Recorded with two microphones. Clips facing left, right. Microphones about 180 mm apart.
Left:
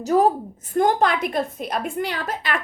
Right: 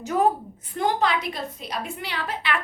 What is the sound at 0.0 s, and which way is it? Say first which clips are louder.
A woman's voice: left 4 dB; 40° left (ahead or behind).